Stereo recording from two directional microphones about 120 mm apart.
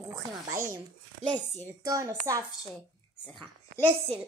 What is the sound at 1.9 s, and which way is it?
Speech, 30° right (ahead or behind).